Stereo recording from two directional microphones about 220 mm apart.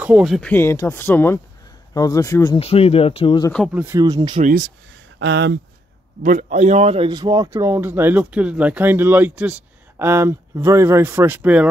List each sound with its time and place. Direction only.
0.0 s speech: 5° right (ahead or behind); by 2.6 s 15° left (ahead or behind)
2.6 s speech: 25° left (ahead or behind)
3.5 s speech: centre (ahead or behind)
3.8 s speech: 15° right (ahead or behind)
4.4 s speech: 40° right (ahead or behind)
5.2 s speech: 55° right (ahead or behind)
6.2 s speech: 35° right (ahead or behind); by 11.7 s 5° right (ahead or behind)